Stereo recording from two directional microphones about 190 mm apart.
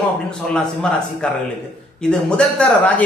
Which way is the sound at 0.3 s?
5° left (ahead or behind).